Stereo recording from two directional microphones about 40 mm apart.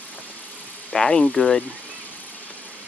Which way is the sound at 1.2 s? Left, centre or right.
Left.